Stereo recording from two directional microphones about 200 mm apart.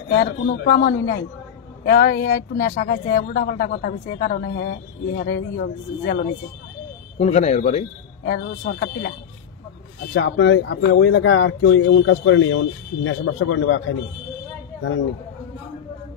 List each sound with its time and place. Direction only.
0.7 s speech: 50° left (ahead or behind); by 7.8 s 35° left (ahead or behind)
8.3 s speech: 50° left (ahead or behind)
10.1 s speech: 70° left (ahead or behind)